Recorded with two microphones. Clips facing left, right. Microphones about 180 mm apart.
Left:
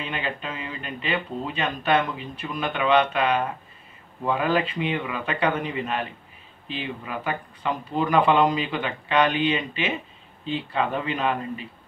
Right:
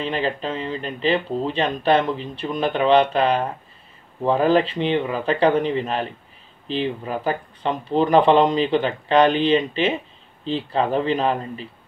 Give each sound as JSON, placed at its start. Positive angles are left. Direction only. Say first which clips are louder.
{"t": 0.0, "sound": "speech", "louder": "right 7 dB", "side_deg": -30}